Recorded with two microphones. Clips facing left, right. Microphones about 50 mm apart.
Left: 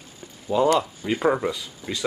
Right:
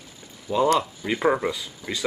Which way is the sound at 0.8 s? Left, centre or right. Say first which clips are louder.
Left 1 dB; centre.